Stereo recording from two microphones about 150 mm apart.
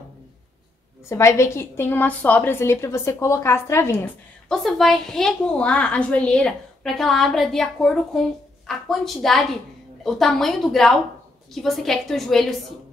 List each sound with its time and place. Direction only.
1.0 s a woman's voice: 20° left (ahead or behind)
4.5 s a woman's voice: centre (ahead or behind)